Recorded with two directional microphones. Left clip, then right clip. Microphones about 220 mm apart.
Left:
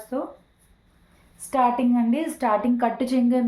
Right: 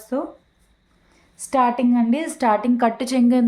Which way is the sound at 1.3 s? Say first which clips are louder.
Right 2 dB; 45° right (ahead or behind).